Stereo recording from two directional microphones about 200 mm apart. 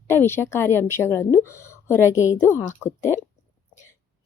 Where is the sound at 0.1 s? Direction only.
10° left (ahead or behind).